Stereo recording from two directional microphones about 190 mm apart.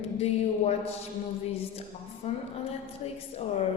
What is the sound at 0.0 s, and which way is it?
Speech, 35° left (ahead or behind).